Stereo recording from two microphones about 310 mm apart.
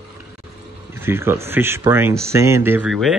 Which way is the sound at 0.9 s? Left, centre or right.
Centre.